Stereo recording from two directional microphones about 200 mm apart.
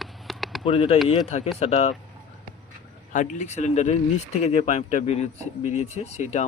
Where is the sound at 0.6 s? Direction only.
30° left (ahead or behind).